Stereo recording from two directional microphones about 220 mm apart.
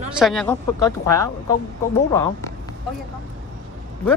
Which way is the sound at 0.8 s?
15° left (ahead or behind).